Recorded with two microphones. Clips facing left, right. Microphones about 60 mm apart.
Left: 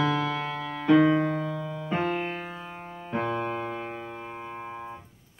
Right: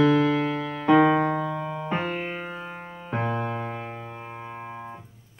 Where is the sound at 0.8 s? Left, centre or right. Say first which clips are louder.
Right 2 dB; right.